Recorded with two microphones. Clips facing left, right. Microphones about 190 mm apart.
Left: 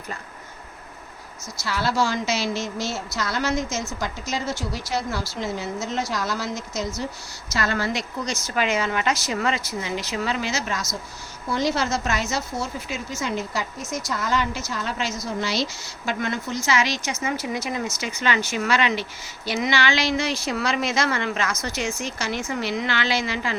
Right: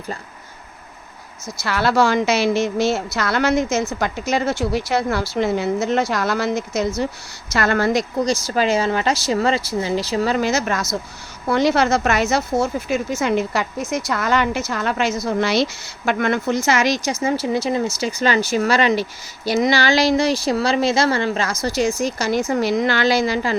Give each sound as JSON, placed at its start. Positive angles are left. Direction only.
{"t": 1.6, "sound": "a woman's voice", "side_deg": -65}
{"t": 8.2, "sound": "speech", "side_deg": -35}
{"t": 11.4, "sound": "a woman's voice", "side_deg": -65}